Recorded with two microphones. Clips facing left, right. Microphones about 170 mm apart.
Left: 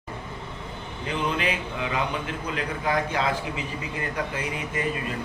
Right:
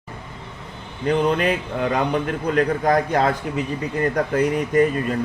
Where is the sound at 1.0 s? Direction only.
45° right (ahead or behind).